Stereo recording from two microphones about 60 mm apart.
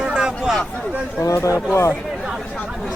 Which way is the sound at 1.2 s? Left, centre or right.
Left.